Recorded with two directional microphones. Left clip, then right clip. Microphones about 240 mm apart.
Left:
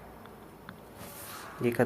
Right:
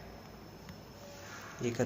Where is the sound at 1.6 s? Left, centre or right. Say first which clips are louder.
Left 7 dB; left.